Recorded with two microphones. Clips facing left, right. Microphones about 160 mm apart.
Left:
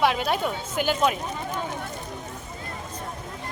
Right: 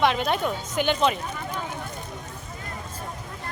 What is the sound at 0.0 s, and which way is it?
A woman's voice, 5° left (ahead or behind).